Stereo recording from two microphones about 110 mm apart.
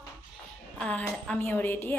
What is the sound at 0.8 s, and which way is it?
A woman's voice, 10° left (ahead or behind).